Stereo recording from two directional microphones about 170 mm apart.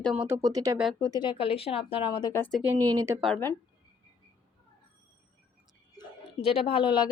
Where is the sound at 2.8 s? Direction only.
20° right (ahead or behind).